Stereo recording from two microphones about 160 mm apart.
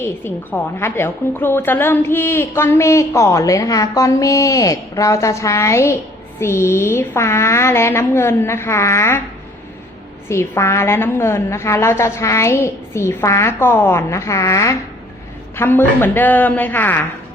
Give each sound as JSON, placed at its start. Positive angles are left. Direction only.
{"t": 0.0, "sound": "a woman's voice", "side_deg": 15}
{"t": 10.2, "sound": "a woman's voice", "side_deg": 15}